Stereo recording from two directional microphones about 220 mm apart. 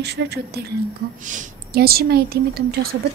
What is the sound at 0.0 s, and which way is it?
A woman's voice, 50° right (ahead or behind).